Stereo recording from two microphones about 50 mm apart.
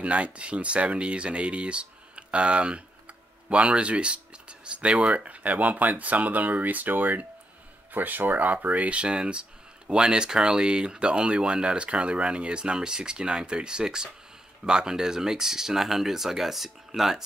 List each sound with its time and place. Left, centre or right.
0.0 s speech: right; by 17.2 s centre